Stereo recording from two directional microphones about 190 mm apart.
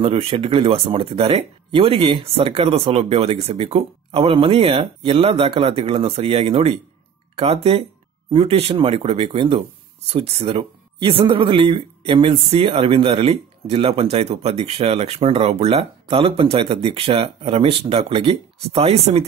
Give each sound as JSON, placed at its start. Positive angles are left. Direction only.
{"t": 0.0, "sound": "speech", "side_deg": -30}